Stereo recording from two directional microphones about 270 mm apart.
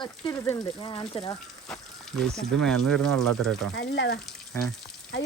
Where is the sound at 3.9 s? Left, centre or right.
Left.